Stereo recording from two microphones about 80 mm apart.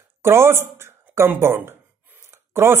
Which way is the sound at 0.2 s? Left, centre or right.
Right.